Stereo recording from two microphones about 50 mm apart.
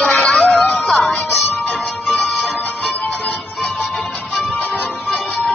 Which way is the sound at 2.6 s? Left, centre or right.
Left.